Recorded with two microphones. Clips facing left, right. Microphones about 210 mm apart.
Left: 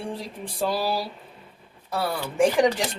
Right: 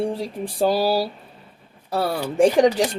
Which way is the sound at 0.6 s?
40° right (ahead or behind).